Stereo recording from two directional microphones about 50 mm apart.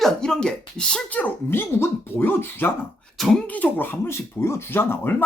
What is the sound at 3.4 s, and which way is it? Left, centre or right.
Speech, left.